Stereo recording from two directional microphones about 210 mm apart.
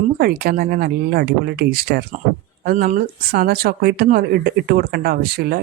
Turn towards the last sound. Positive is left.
turn(degrees=-50)  # may be behind; listen again after turning